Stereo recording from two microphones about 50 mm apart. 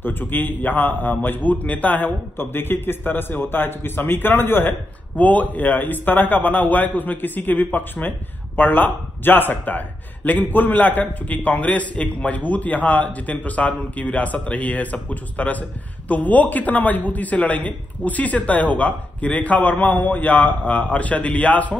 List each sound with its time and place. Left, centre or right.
0.0 s a man's voice: left
5.1 s a man's voice: left